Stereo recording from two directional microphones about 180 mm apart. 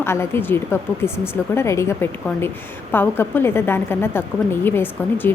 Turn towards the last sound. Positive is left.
turn(degrees=10)  # may be behind; listen again after turning